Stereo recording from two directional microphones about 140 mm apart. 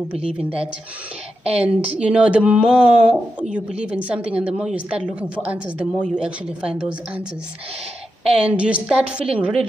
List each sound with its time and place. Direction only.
0.4 s speech: 45° right (ahead or behind)
1.5 s speech: 10° right (ahead or behind)
8.4 s a woman's voice: 10° right (ahead or behind)